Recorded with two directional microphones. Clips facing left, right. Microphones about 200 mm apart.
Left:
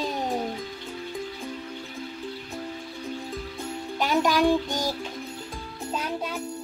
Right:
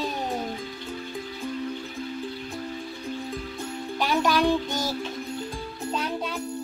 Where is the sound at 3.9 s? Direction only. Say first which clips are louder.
Left 1 dB; 15° left (ahead or behind).